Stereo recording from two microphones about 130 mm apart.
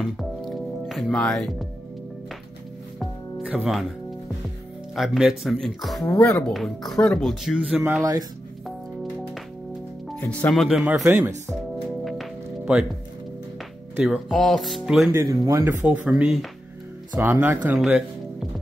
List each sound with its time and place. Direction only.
0.0 s music: centre (ahead or behind)
3.4 s speech: 5° right (ahead or behind)
4.9 s speech: centre (ahead or behind)
6.0 s speech: 20° left (ahead or behind)
6.5 s speech: centre (ahead or behind)
8.0 s speech: 30° right (ahead or behind)
10.2 s speech: 10° left (ahead or behind)
10.5 s speech: centre (ahead or behind)
12.0 s music: centre (ahead or behind)
13.9 s speech: 5° right (ahead or behind)
15.1 s speech: 25° right (ahead or behind)
15.8 s speech: 10° right (ahead or behind)
17.7 s music: 5° right (ahead or behind)